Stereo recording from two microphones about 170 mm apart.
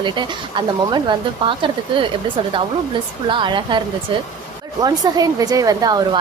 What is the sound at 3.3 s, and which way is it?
Speech, 30° right (ahead or behind).